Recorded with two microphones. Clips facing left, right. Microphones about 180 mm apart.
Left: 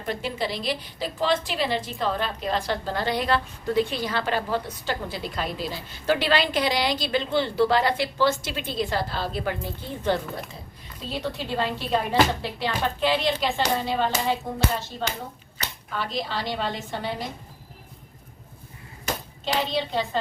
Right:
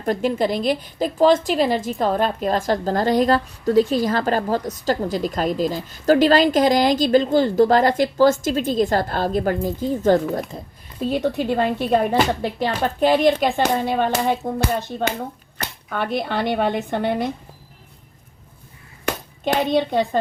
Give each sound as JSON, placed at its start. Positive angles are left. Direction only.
{"t": 0.0, "sound": "a woman's voice", "side_deg": -45}
{"t": 14.9, "sound": "a woman's voice", "side_deg": -65}
{"t": 19.0, "sound": "hands", "side_deg": -55}